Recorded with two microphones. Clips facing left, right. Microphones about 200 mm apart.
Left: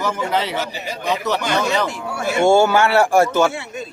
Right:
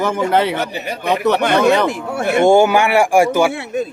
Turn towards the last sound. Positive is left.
turn(degrees=-55)  # may be behind; listen again after turning